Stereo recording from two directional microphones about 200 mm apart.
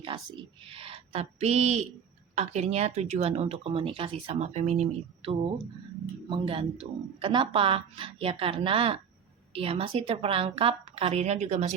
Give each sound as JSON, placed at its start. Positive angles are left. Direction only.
{"t": 0.0, "sound": "a woman's voice", "side_deg": -25}